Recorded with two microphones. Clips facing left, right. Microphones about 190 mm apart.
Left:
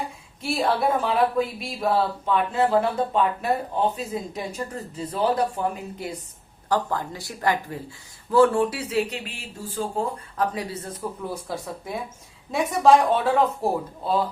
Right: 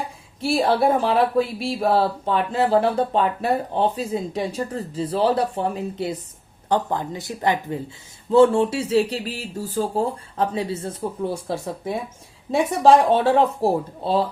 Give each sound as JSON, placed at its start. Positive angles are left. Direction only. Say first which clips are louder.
{"t": 0.4, "sound": "speech", "louder": "right 4 dB", "side_deg": -30}